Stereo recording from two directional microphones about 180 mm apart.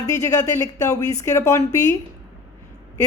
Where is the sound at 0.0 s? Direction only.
20° left (ahead or behind).